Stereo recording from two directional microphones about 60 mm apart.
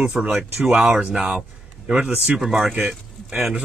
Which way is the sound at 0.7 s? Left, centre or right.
Right.